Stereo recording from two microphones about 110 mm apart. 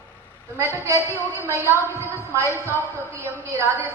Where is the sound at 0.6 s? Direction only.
25° right (ahead or behind).